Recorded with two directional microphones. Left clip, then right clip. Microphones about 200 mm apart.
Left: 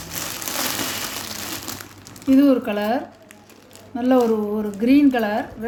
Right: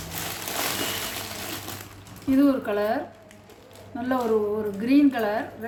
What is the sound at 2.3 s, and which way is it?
A woman's voice, 40° left (ahead or behind).